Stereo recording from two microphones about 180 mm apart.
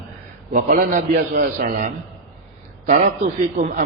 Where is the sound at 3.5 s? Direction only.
45° right (ahead or behind).